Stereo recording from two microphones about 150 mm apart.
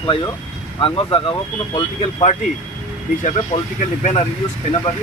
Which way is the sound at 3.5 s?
50° left (ahead or behind).